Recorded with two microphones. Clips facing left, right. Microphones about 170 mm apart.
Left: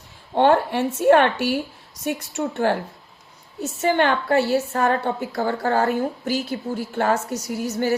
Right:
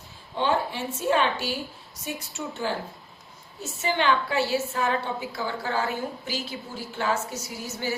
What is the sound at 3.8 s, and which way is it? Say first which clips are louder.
A woman's voice: left 5 dB; 55° left (ahead or behind).